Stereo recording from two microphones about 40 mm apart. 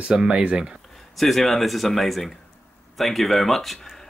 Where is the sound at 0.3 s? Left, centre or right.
Right.